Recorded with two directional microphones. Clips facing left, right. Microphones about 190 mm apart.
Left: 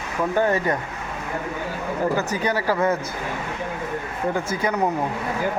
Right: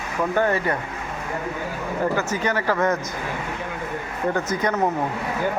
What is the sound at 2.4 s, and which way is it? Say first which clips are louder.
Speech: even; 10° left (ahead or behind).